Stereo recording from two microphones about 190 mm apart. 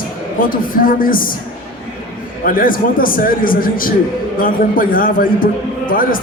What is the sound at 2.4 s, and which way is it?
A man's voice, 45° left (ahead or behind).